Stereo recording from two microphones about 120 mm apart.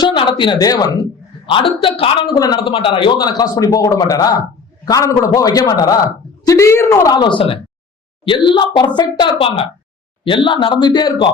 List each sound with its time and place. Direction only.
0.0 s speech: 40° left (ahead or behind)
1.5 s a man's voice: 45° left (ahead or behind)
2.3 s a man's voice: 35° left (ahead or behind)